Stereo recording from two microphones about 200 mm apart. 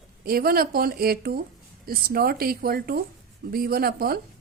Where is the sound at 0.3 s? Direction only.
50° right (ahead or behind).